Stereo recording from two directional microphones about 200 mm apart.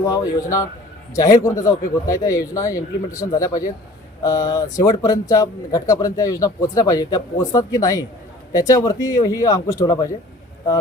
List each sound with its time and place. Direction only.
0.0 s speech: 15° left (ahead or behind)